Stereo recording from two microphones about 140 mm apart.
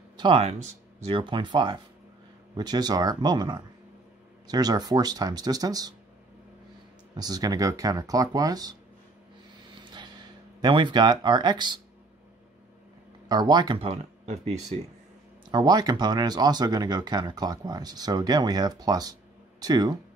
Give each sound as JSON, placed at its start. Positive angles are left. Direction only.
{"t": 0.2, "sound": "speech", "side_deg": -35}
{"t": 0.5, "sound": "speech", "side_deg": -50}
{"t": 1.2, "sound": "speech", "side_deg": -35}
{"t": 7.2, "sound": "speech", "side_deg": -25}
{"t": 9.8, "sound": "a sound", "side_deg": -30}
{"t": 13.3, "sound": "speech", "side_deg": -30}
{"t": 13.8, "sound": "speech", "side_deg": -50}
{"t": 15.5, "sound": "speech", "side_deg": -30}